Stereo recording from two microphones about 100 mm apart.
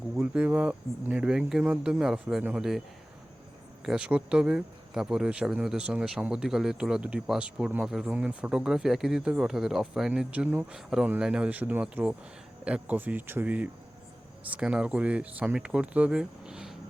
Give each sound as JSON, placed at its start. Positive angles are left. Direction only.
{"t": 0.2, "sound": "speech", "side_deg": -15}
{"t": 3.8, "sound": "speech", "side_deg": -10}